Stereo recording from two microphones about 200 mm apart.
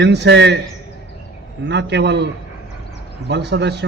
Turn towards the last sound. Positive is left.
turn(degrees=-60)  # may be behind; listen again after turning